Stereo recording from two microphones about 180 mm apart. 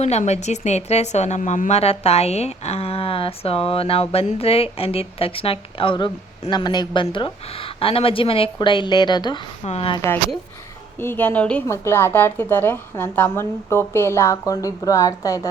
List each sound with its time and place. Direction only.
0.0 s a woman's voice: 40° left (ahead or behind)
11.0 s a woman's voice: 10° left (ahead or behind)